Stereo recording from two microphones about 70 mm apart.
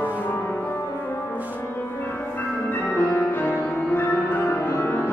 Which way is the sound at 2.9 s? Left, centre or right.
Left.